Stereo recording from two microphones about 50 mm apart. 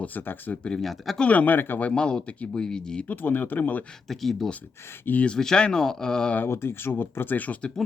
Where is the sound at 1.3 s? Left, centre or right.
Left.